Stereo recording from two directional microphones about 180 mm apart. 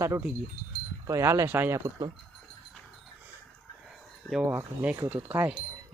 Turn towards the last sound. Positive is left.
turn(degrees=-10)  # may be behind; listen again after turning